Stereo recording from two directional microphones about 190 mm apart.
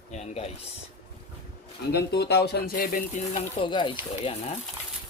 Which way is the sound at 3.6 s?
25° left (ahead or behind).